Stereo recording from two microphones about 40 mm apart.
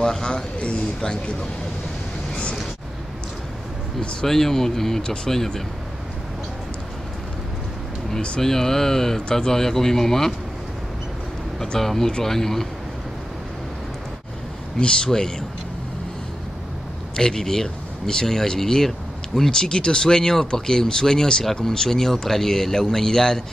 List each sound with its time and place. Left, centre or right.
0.0 s a sound: centre
4.3 s speech: centre
5.0 s speech: left
5.3 s speech: centre
8.4 s speech: centre
11.6 s speech: centre
14.8 s speech: left
17.2 s speech: centre